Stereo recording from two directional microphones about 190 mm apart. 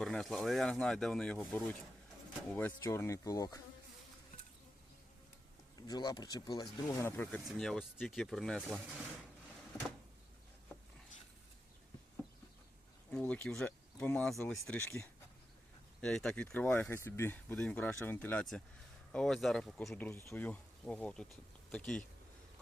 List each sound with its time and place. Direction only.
0.0 s speech: centre (ahead or behind); by 3.6 s 20° left (ahead or behind)
5.7 s speech: 20° left (ahead or behind); by 8.8 s centre (ahead or behind)
9.7 s a sound: 5° left (ahead or behind)
13.1 s speech: 5° left (ahead or behind)